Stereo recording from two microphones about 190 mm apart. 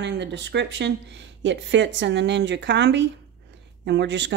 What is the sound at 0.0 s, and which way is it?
Speech, 65° right (ahead or behind).